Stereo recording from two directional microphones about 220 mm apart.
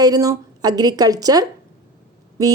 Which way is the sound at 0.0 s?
15° right (ahead or behind).